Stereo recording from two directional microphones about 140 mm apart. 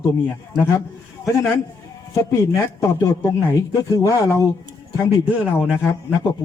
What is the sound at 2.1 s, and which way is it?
Speech, 20° left (ahead or behind).